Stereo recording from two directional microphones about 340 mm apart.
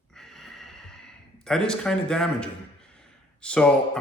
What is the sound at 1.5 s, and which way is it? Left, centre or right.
A man's voice, centre.